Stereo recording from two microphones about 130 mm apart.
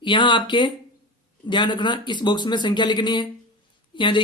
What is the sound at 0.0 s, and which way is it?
Speech, 40° left (ahead or behind).